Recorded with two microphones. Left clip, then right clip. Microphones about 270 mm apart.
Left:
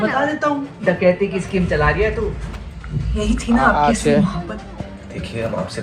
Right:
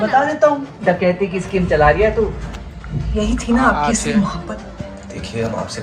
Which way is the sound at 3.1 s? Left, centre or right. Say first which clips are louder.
Right 2 dB; right.